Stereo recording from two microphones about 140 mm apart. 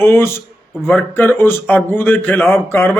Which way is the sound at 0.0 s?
15° left (ahead or behind).